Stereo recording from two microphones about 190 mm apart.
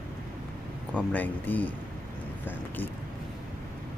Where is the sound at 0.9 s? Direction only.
10° left (ahead or behind).